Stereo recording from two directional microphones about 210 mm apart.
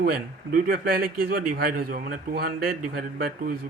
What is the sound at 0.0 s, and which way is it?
Speech, 45° right (ahead or behind).